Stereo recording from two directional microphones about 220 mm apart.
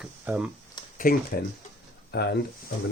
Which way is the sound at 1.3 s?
45° left (ahead or behind).